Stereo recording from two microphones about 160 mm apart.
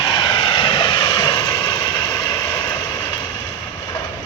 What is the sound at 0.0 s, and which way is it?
Vehicle, 25° left (ahead or behind).